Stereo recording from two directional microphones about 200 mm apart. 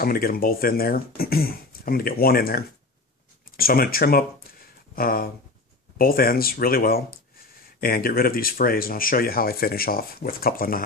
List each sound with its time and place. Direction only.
0.0 s speech: 45° left (ahead or behind)